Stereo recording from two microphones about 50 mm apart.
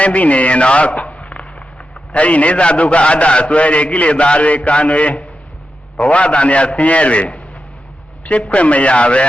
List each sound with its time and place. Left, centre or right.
0.0 s a man's voice: left